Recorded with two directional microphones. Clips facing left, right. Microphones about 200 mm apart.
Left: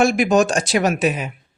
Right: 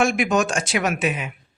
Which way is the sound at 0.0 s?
35° left (ahead or behind).